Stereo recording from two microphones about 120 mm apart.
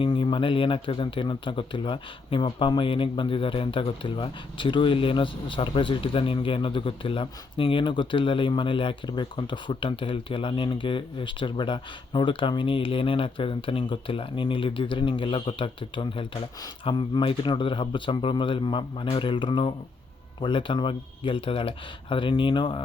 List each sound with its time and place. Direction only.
0.0 s speech: 40° left (ahead or behind)